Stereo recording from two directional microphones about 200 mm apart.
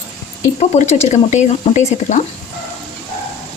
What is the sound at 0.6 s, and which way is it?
Speech, 35° left (ahead or behind).